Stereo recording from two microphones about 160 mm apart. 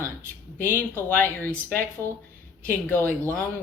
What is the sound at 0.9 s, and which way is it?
Speech, 15° left (ahead or behind).